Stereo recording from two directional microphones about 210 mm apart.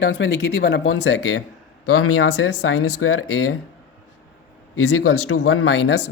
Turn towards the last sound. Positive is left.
turn(degrees=70)  # may be behind; listen again after turning